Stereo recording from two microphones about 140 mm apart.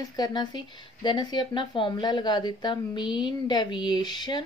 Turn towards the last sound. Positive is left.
turn(degrees=30)  # may be behind; listen again after turning